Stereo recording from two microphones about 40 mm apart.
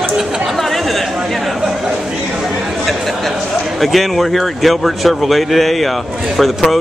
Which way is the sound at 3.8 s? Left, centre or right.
Centre.